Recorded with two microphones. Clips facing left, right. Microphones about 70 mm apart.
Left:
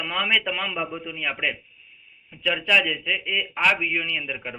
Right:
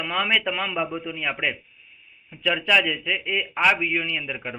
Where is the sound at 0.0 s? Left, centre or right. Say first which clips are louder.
Right 1 dB; centre.